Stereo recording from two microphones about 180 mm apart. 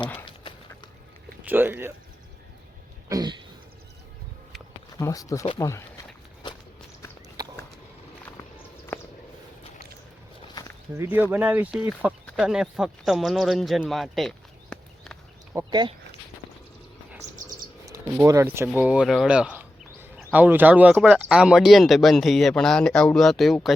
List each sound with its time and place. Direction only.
1.5 s speech: 10° right (ahead or behind)
3.1 s speech: 20° right (ahead or behind)
4.9 s speech: 20° left (ahead or behind)
7.4 s a sound: 20° right (ahead or behind)
10.9 s speech: 10° right (ahead or behind); by 15.2 s 5° left (ahead or behind)
15.5 s speech: 25° right (ahead or behind)
17.8 s speech: 15° right (ahead or behind); by 23.6 s centre (ahead or behind)